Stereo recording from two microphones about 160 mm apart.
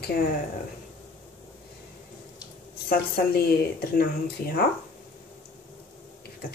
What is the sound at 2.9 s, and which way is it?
A woman's voice, 75° left (ahead or behind).